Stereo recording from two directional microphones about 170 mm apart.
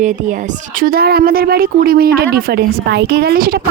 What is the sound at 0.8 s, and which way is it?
Speech, 60° right (ahead or behind).